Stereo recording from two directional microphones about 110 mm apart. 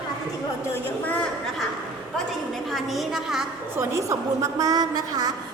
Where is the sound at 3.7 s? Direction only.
30° right (ahead or behind).